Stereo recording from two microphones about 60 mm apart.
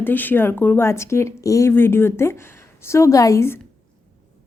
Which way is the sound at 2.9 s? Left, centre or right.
Left.